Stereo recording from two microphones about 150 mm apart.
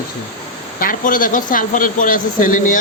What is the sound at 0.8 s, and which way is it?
Speech, 65° left (ahead or behind).